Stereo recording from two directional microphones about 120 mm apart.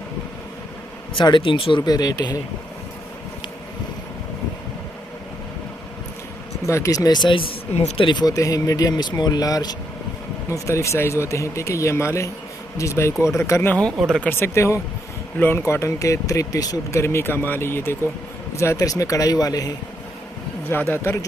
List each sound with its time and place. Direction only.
1.1 s speech: 40° left (ahead or behind)
1.8 s speech: 30° left (ahead or behind)
6.6 s speech: 25° left (ahead or behind); by 7.5 s 45° left (ahead or behind)
7.7 s speech: 65° left (ahead or behind)
8.0 s speech: 40° left (ahead or behind); by 13.7 s 20° left (ahead or behind)
14.0 s speech: 5° left (ahead or behind)
14.3 s speech: 20° left (ahead or behind)
20.7 s speech: 20° left (ahead or behind)